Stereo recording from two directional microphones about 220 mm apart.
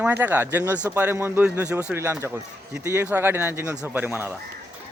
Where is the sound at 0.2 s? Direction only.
10° right (ahead or behind).